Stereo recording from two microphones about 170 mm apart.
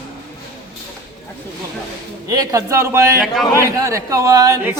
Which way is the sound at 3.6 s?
20° right (ahead or behind).